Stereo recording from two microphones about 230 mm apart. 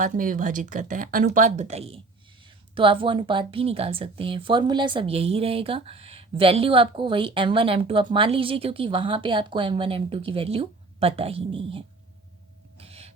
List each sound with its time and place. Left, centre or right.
0.0 s speech: right
12.7 s owl: right